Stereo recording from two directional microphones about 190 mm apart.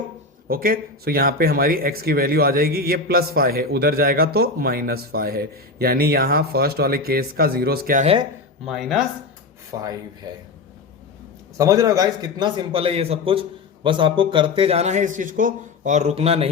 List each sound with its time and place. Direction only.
0.4 s speech: 50° right (ahead or behind)
8.0 s a man's voice: 30° right (ahead or behind)
8.6 s speech: centre (ahead or behind)
11.5 s a man's voice: 15° right (ahead or behind)